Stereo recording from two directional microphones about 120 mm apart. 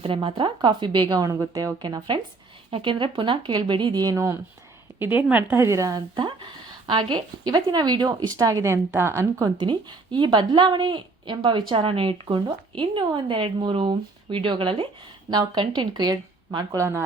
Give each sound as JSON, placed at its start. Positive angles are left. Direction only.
{"t": 0.0, "sound": "a woman's voice", "side_deg": -50}
{"t": 2.6, "sound": "speech", "side_deg": -50}
{"t": 4.9, "sound": "speech", "side_deg": -15}
{"t": 6.1, "sound": "a woman's voice", "side_deg": -40}
{"t": 9.6, "sound": "a woman's voice", "side_deg": -40}